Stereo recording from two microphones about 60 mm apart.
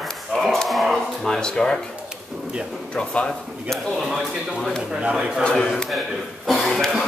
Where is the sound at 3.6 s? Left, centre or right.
Centre.